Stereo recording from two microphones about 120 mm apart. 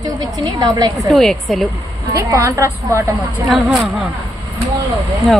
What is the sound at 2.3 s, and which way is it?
Speech, 25° right (ahead or behind).